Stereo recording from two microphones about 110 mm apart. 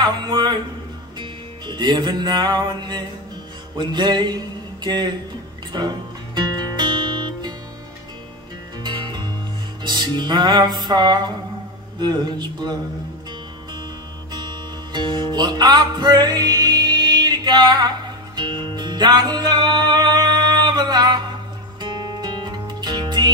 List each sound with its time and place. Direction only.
0.0 s a man's voice: 45° right (ahead or behind)
1.2 s music: 45° right (ahead or behind)
8.8 s music: 45° right (ahead or behind)
14.3 s music: 40° right (ahead or behind)